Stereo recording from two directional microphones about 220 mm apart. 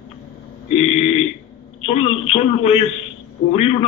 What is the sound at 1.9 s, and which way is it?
A man's voice, 30° left (ahead or behind).